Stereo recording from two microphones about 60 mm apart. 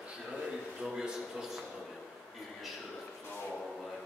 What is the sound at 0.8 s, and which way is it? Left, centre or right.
Speech, centre.